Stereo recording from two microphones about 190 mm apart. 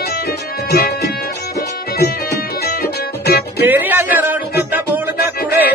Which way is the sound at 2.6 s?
55° left (ahead or behind).